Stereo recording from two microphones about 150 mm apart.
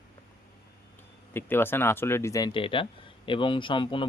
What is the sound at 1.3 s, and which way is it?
Speech, 15° left (ahead or behind).